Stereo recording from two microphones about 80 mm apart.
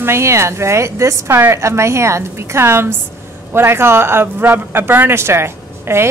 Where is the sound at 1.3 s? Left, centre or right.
Right.